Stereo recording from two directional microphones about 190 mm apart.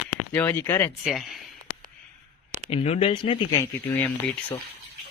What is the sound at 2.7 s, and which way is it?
Speech, 30° left (ahead or behind).